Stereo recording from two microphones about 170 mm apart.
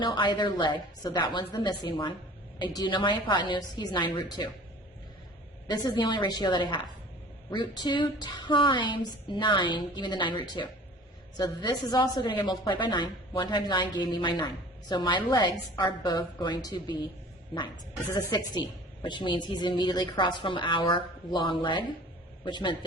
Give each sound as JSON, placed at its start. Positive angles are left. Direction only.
{"t": 0.0, "sound": "a woman's voice", "side_deg": 30}
{"t": 5.6, "sound": "a woman's voice", "side_deg": 25}
{"t": 18.1, "sound": "a woman's voice", "side_deg": 20}